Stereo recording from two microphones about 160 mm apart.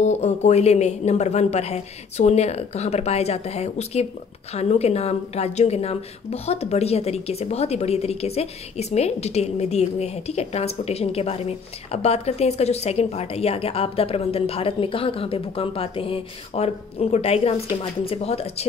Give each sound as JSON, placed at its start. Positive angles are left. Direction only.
{"t": 0.0, "sound": "speech", "side_deg": 45}